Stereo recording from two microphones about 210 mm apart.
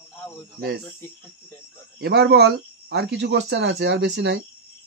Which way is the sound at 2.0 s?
50° right (ahead or behind).